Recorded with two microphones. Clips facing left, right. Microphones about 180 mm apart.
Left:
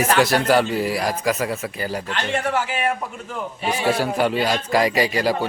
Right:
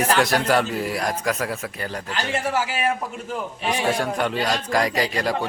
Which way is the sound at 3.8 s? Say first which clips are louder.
Left 4 dB; 5° left (ahead or behind).